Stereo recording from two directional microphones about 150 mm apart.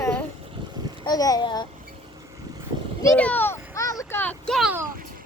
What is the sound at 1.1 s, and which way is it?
Speech, 25° left (ahead or behind).